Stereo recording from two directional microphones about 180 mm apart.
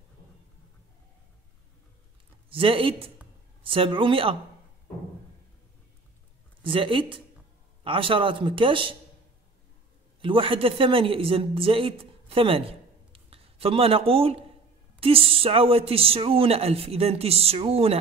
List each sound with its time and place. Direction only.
2.5 s speech: 30° right (ahead or behind)
6.6 s speech: 30° right (ahead or behind)
10.2 s speech: 30° right (ahead or behind)